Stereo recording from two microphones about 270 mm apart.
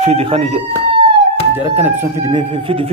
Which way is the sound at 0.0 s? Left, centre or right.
Right.